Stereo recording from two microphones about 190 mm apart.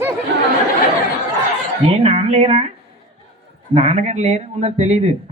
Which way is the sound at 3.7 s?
35° right (ahead or behind).